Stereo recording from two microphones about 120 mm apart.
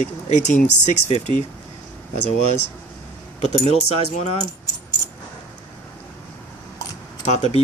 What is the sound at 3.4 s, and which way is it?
Speech, 65° left (ahead or behind).